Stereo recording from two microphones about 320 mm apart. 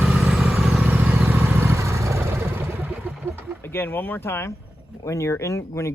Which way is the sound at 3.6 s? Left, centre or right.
Centre.